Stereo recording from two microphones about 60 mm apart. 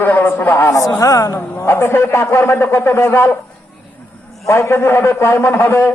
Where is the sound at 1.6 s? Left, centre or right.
Left.